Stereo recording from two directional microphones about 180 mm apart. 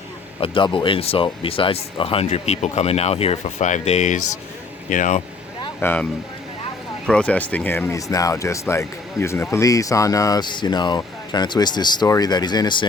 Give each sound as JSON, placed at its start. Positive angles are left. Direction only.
{"t": 0.3, "sound": "speech", "side_deg": 25}
{"t": 5.8, "sound": "speech", "side_deg": 10}
{"t": 7.1, "sound": "speech", "side_deg": 5}